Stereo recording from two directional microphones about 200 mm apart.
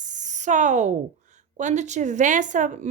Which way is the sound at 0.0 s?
40° right (ahead or behind).